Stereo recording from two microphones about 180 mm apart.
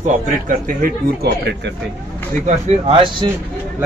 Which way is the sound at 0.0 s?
50° right (ahead or behind).